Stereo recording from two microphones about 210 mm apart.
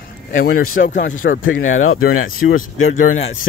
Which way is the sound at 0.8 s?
50° left (ahead or behind).